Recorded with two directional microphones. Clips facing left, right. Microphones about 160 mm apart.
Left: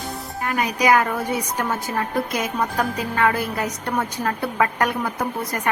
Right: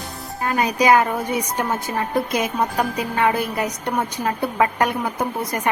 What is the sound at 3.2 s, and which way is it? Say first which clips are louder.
A woman's voice: right 1 dB; 20° right (ahead or behind).